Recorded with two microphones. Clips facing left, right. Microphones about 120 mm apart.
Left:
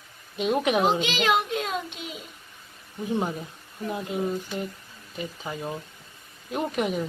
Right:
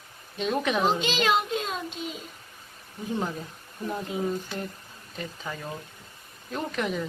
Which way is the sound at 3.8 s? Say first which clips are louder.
Left 1 dB; 5° left (ahead or behind).